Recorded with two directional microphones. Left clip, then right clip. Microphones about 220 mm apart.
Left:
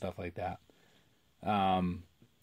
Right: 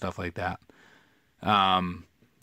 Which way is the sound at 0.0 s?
30° right (ahead or behind).